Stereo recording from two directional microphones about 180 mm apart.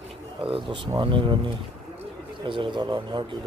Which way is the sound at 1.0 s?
30° right (ahead or behind).